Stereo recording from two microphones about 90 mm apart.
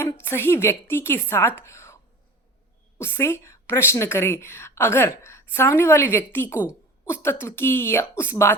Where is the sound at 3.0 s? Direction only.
30° left (ahead or behind).